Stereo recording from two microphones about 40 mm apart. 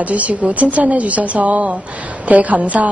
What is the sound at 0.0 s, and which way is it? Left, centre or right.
A woman's voice, right.